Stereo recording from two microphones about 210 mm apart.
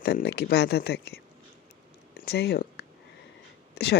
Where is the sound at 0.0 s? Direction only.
50° left (ahead or behind).